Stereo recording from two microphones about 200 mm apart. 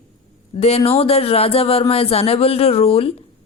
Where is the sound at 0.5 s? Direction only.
30° left (ahead or behind).